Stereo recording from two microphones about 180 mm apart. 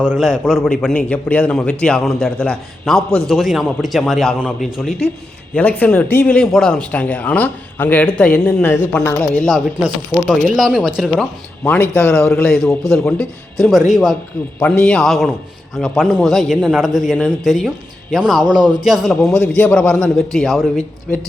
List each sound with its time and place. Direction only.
0.0 s speech: centre (ahead or behind)
18.9 s speech: centre (ahead or behind)